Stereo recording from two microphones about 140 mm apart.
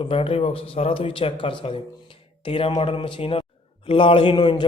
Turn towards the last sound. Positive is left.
turn(degrees=35)  # may be behind; listen again after turning